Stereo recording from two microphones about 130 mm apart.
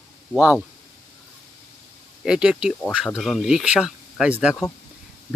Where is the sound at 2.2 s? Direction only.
5° right (ahead or behind).